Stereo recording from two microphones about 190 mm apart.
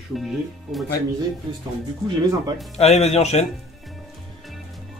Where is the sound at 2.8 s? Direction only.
35° left (ahead or behind).